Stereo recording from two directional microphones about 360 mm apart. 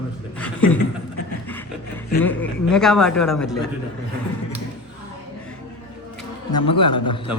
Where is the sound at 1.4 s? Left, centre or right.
Centre.